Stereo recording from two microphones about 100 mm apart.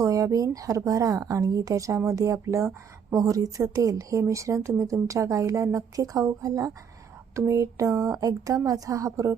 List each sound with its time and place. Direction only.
0.0 s speech: 35° right (ahead or behind)